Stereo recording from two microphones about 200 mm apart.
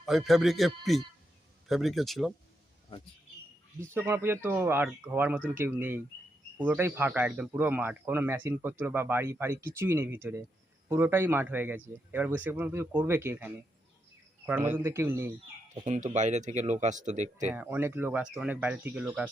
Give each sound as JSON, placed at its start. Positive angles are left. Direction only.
{"t": 0.0, "sound": "a man's voice", "side_deg": 0}
{"t": 3.8, "sound": "speech", "side_deg": -10}
{"t": 15.7, "sound": "speech", "side_deg": -35}
{"t": 17.5, "sound": "speech", "side_deg": -10}